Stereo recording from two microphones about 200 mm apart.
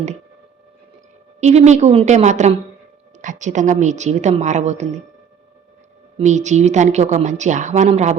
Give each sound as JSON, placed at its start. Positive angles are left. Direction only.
{"t": 1.4, "sound": "a woman's voice", "side_deg": -35}
{"t": 6.1, "sound": "a woman's voice", "side_deg": -35}